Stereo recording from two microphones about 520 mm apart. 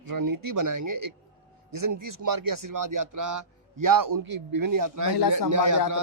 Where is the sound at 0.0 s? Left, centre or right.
Right.